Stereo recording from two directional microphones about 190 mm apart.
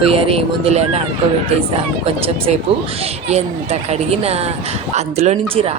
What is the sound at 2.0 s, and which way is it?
Speech, 30° right (ahead or behind).